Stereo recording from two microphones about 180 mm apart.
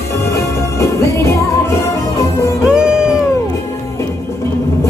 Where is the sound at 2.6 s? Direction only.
5° right (ahead or behind).